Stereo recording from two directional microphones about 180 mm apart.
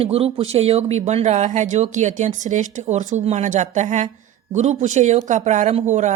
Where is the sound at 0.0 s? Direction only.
30° right (ahead or behind).